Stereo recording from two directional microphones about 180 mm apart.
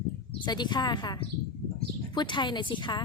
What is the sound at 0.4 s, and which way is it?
Speech, 25° left (ahead or behind).